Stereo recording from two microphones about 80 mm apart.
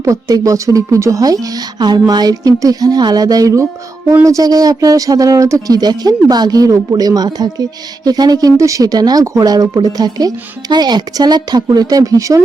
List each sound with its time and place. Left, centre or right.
0.0 s a woman's voice: right